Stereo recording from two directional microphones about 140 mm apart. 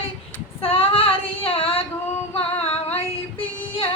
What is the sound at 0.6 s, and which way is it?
Child singing, 40° left (ahead or behind).